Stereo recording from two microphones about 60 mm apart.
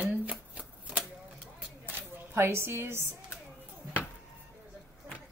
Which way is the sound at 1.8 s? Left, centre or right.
Right.